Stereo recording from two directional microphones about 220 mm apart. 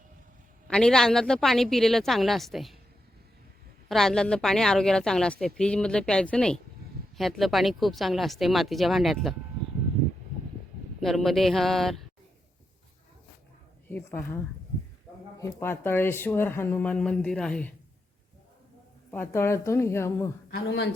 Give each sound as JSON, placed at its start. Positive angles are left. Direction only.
{"t": 0.7, "sound": "speech", "side_deg": 5}
{"t": 3.8, "sound": "speech", "side_deg": 0}
{"t": 11.0, "sound": "speech", "side_deg": 0}
{"t": 13.9, "sound": "speech", "side_deg": 10}
{"t": 19.1, "sound": "speech", "side_deg": 10}
{"t": 20.7, "sound": "a man's voice", "side_deg": 55}